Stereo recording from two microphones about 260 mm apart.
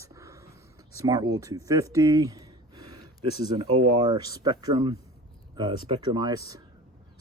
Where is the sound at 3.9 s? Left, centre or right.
Centre.